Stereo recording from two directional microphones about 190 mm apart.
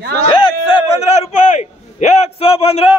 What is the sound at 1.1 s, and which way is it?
A man's voice, 35° left (ahead or behind).